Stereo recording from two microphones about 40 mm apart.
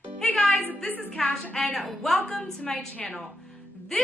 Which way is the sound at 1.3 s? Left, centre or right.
Centre.